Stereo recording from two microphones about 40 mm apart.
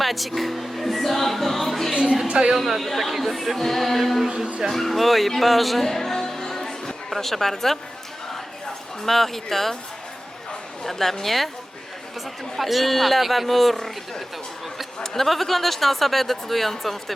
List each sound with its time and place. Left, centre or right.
0.0 s music: centre
1.9 s a sound: right
2.2 s a woman's voice: right
2.6 s speech: centre
4.7 s music: centre
7.1 s speech: centre
9.0 s speech: centre
10.8 s speech: centre
12.5 s speech: centre
15.0 s speech: centre